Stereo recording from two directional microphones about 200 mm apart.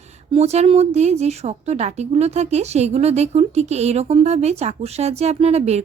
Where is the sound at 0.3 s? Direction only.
30° right (ahead or behind).